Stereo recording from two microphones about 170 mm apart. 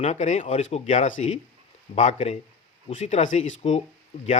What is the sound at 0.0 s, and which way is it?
A man's voice, 45° left (ahead or behind).